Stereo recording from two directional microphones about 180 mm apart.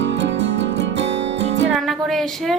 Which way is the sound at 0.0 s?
75° right (ahead or behind).